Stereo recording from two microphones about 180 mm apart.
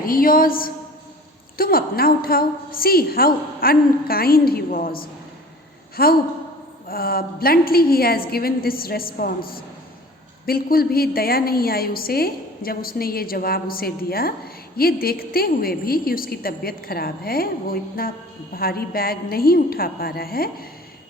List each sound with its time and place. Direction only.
0.0 s a woman's voice: 50° left (ahead or behind)